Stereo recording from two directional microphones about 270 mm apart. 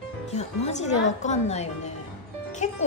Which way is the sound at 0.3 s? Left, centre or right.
Left.